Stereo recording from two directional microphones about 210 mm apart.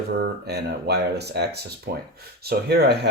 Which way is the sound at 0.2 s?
50° right (ahead or behind).